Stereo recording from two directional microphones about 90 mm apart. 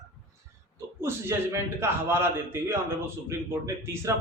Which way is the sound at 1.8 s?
25° right (ahead or behind).